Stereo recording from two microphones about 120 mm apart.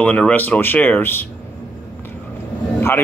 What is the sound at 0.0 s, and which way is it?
Speech, 10° left (ahead or behind).